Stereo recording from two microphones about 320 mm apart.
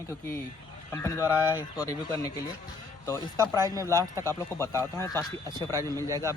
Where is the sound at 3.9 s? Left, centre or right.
Centre.